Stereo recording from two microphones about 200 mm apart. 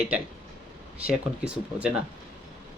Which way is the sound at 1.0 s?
5° right (ahead or behind).